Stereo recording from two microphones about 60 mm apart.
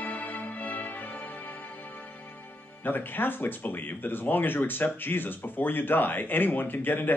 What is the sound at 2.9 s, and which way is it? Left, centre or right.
Speech, left.